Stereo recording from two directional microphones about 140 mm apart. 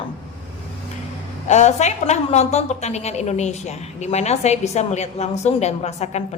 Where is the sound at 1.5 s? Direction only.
55° left (ahead or behind).